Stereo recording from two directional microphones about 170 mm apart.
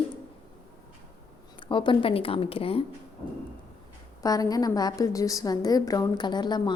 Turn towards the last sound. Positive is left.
turn(degrees=25)  # may be behind; listen again after turning